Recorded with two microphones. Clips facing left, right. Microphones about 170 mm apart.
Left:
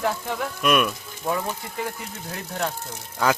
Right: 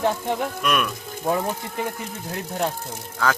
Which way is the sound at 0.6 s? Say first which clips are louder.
Left 6 dB; 5° left (ahead or behind).